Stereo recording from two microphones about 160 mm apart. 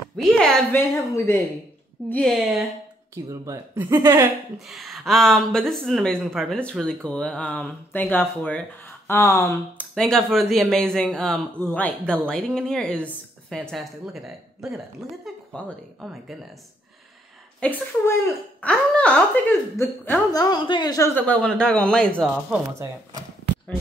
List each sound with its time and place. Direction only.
0.4 s speech: 10° left (ahead or behind)
2.0 s speech: 5° left (ahead or behind)
3.3 s speech: 15° right (ahead or behind)
4.6 s speech: centre (ahead or behind); by 9.8 s 20° left (ahead or behind)
9.9 s speech: 5° left (ahead or behind)
17.6 s speech: 15° left (ahead or behind)